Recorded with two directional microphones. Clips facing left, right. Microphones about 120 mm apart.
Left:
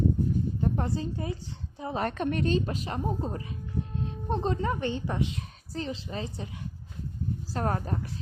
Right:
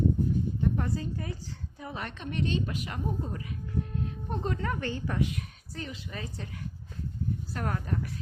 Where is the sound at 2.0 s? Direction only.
50° left (ahead or behind); by 6.6 s 20° left (ahead or behind).